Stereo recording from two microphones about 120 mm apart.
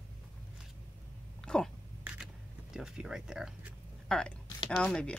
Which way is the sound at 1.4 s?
5° left (ahead or behind).